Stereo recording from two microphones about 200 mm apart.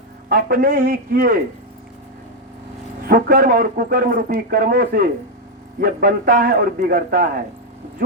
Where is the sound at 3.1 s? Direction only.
45° right (ahead or behind).